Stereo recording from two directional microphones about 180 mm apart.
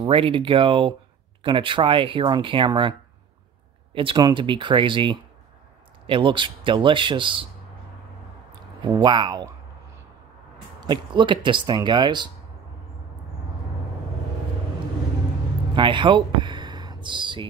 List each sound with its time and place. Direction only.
0.0 s speech: 30° right (ahead or behind)
3.9 s speech: 30° right (ahead or behind)
8.8 s speech: 25° right (ahead or behind)
10.8 s speech: 25° right (ahead or behind)
15.7 s speech: 25° right (ahead or behind)